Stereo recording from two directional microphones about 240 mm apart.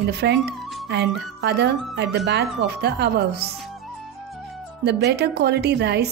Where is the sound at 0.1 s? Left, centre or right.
Right.